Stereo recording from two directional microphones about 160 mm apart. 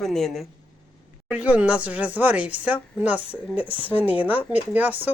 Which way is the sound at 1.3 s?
10° right (ahead or behind).